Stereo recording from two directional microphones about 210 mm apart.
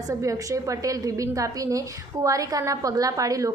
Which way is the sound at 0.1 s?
15° right (ahead or behind).